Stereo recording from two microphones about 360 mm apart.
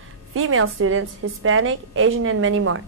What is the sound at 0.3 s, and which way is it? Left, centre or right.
A woman's voice, right.